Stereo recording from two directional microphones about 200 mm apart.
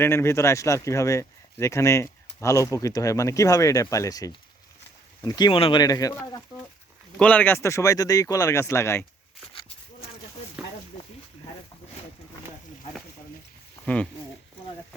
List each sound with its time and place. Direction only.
0.0 s speech: 15° left (ahead or behind)
7.2 s speech: 5° left (ahead or behind)
13.8 s speech: 5° left (ahead or behind)